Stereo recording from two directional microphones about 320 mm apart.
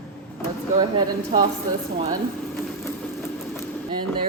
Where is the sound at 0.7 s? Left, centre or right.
Centre.